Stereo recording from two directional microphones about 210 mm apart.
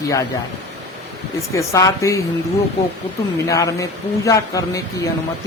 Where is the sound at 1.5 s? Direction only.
15° left (ahead or behind).